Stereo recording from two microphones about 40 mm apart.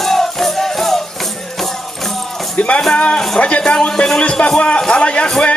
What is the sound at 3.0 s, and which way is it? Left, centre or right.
A man's voice, left.